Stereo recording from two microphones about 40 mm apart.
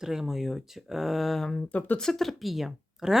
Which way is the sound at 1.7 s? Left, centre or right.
Left.